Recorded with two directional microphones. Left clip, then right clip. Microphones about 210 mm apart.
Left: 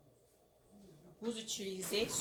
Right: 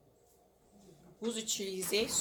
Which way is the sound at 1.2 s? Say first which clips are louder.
Right 5 dB; 40° right (ahead or behind).